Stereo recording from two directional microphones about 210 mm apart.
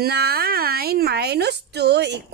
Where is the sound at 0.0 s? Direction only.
50° right (ahead or behind).